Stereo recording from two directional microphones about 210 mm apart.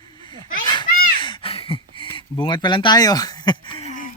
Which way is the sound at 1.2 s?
25° left (ahead or behind).